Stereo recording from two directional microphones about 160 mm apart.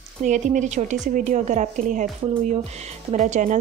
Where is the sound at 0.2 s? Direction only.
50° right (ahead or behind).